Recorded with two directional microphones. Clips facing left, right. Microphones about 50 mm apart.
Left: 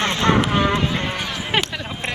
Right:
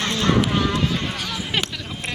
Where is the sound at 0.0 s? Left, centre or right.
Left.